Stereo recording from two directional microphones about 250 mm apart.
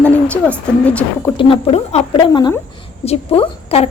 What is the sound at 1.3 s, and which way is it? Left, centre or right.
A woman's voice, left.